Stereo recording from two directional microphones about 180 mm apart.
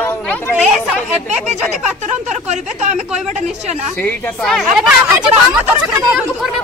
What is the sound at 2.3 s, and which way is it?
Speech, 40° right (ahead or behind).